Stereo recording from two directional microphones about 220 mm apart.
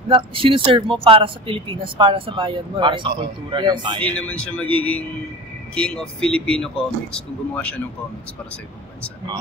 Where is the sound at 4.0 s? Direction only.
5° left (ahead or behind).